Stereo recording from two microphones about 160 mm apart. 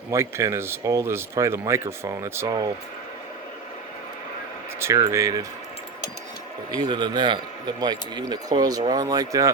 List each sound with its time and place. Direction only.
0.1 s speech: 15° right (ahead or behind)
4.8 s speech: 20° right (ahead or behind)
6.7 s speech: 25° right (ahead or behind)